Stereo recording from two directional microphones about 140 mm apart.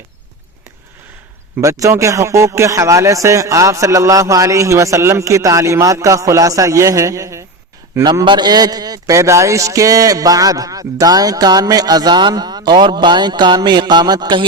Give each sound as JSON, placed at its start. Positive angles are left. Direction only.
{"t": 1.6, "sound": "a man's voice", "side_deg": -20}
{"t": 8.0, "sound": "a man's voice", "side_deg": -35}